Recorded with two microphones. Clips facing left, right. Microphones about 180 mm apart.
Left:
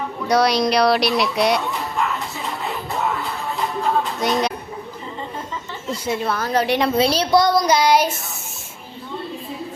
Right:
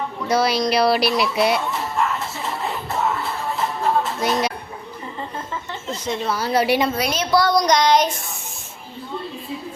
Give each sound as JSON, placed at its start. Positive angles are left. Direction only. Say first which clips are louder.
{"t": 0.3, "sound": "speech", "louder": "left 2 dB", "side_deg": 0}
{"t": 4.2, "sound": "speech", "louder": "left 1 dB", "side_deg": 0}
{"t": 5.9, "sound": "speech", "louder": "left 2 dB", "side_deg": 5}
{"t": 6.3, "sound": "a woman's voice", "louder": "right 3 dB", "side_deg": -10}
{"t": 6.9, "sound": "a woman's voice", "louder": "left 5 dB", "side_deg": 30}
{"t": 7.5, "sound": "child singing", "louder": "even", "side_deg": 5}